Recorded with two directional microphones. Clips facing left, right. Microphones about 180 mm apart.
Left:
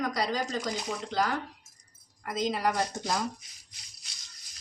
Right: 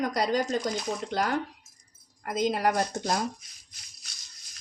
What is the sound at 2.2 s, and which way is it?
Speech, 50° right (ahead or behind).